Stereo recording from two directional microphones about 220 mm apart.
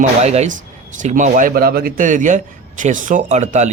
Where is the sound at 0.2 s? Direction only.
30° right (ahead or behind).